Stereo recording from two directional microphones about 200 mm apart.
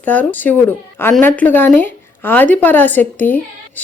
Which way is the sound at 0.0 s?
10° left (ahead or behind).